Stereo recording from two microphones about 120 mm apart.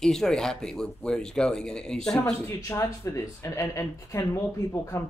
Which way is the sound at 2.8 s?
25° left (ahead or behind).